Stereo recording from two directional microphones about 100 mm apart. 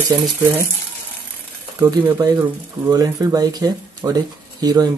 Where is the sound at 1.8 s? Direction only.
35° right (ahead or behind).